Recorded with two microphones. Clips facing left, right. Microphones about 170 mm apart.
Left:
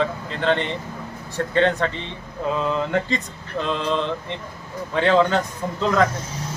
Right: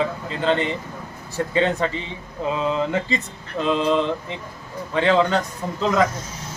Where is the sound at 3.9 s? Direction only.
10° right (ahead or behind).